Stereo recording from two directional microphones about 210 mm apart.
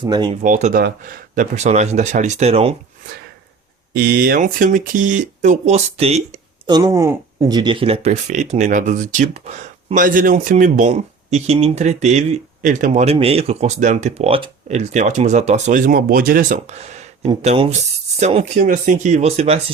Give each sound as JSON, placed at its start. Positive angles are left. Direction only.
{"t": 0.0, "sound": "speech", "side_deg": -20}
{"t": 0.4, "sound": "speech", "side_deg": -40}
{"t": 3.9, "sound": "speech", "side_deg": -45}
{"t": 6.7, "sound": "speech", "side_deg": -20}